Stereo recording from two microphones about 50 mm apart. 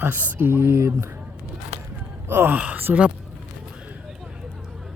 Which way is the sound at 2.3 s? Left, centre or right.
Right.